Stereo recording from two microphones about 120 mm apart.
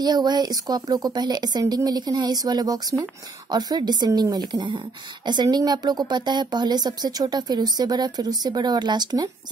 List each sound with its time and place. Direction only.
0.0 s speech: 35° right (ahead or behind)